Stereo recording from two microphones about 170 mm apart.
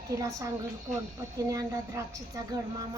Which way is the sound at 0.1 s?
20° right (ahead or behind).